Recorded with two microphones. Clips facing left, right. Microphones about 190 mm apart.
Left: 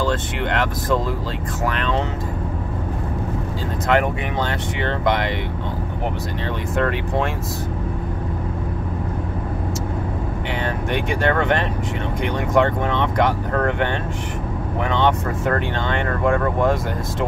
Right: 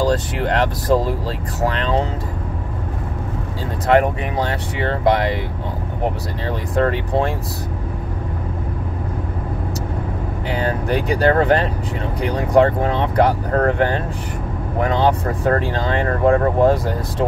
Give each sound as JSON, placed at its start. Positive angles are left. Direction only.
{"t": 0.0, "sound": "speech", "side_deg": -35}
{"t": 3.8, "sound": "speech", "side_deg": -35}
{"t": 6.7, "sound": "speech", "side_deg": -30}
{"t": 10.6, "sound": "speech", "side_deg": -35}